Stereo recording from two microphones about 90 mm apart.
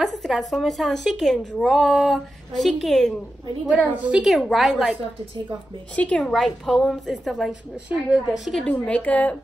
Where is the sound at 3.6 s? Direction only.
15° right (ahead or behind).